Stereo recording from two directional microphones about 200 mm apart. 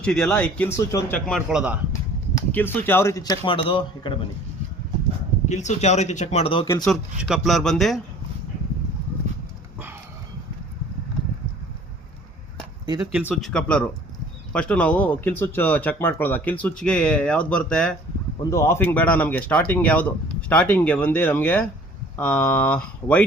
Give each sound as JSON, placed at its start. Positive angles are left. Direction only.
{"t": 0.0, "sound": "speech", "side_deg": 5}
{"t": 1.4, "sound": "speech", "side_deg": -5}
{"t": 2.5, "sound": "speech", "side_deg": 10}
{"t": 5.5, "sound": "a man's voice", "side_deg": 35}
{"t": 6.8, "sound": "speech", "side_deg": 0}
{"t": 12.8, "sound": "a sound", "side_deg": -20}
{"t": 13.1, "sound": "speech", "side_deg": 0}